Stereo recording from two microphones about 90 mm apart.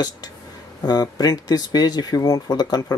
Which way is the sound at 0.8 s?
45° left (ahead or behind).